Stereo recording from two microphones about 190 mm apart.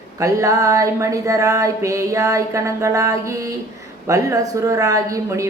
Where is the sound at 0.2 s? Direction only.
15° right (ahead or behind).